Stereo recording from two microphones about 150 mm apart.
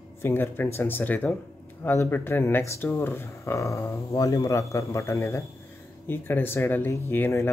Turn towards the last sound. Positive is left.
turn(degrees=15)  # may be behind; listen again after turning